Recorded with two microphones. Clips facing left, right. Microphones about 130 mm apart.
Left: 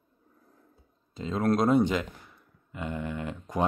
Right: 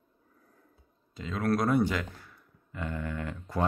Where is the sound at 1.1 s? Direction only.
25° left (ahead or behind).